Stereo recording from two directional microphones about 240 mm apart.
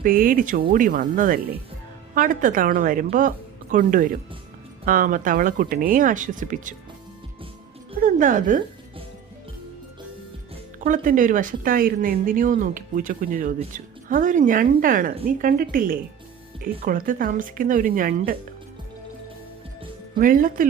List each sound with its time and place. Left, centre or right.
0.0 s speech: right
8.0 s music: right
10.8 s speech: right
20.1 s speech: right